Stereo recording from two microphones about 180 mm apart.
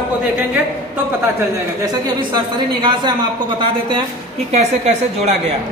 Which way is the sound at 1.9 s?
25° right (ahead or behind).